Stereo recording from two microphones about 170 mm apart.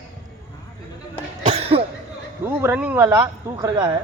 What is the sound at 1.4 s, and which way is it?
Cough, 35° right (ahead or behind).